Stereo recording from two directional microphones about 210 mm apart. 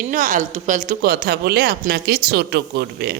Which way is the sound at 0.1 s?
40° right (ahead or behind).